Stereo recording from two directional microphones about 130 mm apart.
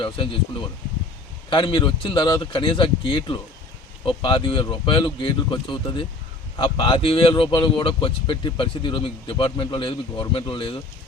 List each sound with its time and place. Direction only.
1.5 s speech: 35° left (ahead or behind)